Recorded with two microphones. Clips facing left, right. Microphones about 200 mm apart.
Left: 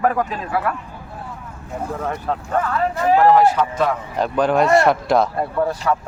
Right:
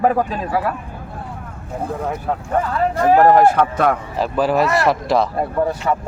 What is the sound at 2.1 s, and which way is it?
Speech, 10° right (ahead or behind).